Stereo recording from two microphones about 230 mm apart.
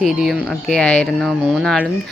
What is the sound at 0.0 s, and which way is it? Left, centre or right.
A woman's voice, centre.